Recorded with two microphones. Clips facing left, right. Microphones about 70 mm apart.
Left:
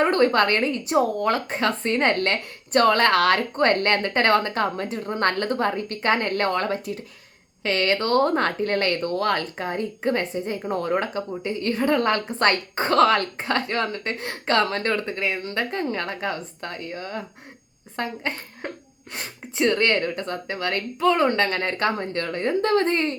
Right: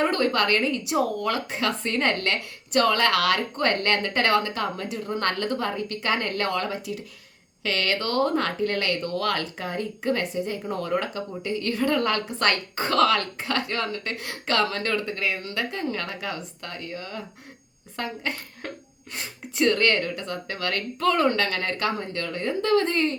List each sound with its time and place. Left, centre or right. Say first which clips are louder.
0.0 s a woman's voice: left 4 dB; left